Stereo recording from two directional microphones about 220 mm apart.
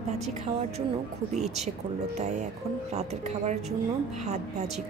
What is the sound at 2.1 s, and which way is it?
Speech, 30° right (ahead or behind).